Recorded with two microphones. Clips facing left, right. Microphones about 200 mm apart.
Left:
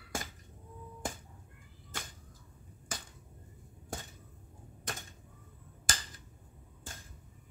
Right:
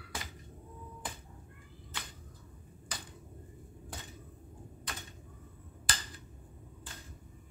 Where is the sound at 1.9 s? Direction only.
45° left (ahead or behind).